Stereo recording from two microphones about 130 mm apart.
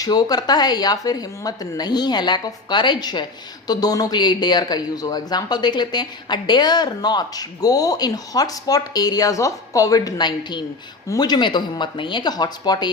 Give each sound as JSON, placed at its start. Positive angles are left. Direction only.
{"t": 0.0, "sound": "speech", "side_deg": 30}